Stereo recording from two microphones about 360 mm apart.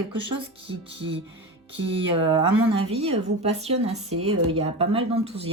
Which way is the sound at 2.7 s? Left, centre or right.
Centre.